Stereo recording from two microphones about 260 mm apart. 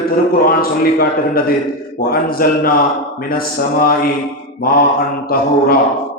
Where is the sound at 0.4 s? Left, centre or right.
Left.